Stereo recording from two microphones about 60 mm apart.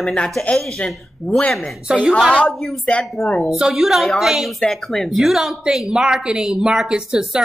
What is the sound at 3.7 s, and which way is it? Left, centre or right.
A woman's voice, centre.